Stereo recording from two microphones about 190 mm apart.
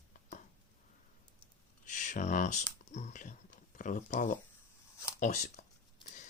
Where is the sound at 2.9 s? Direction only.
40° left (ahead or behind).